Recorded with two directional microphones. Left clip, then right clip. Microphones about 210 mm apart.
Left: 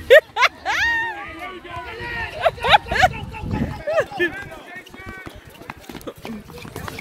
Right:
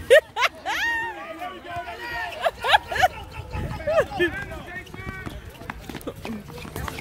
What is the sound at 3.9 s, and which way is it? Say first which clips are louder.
Run: left 1 dB; centre (ahead or behind).